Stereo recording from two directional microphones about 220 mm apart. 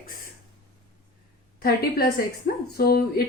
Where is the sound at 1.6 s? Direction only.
45° left (ahead or behind).